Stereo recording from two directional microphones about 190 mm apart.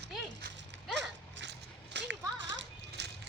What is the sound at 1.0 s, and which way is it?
Children playing, 70° right (ahead or behind).